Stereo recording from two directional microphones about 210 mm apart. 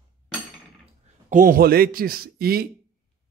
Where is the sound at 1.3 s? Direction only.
40° right (ahead or behind).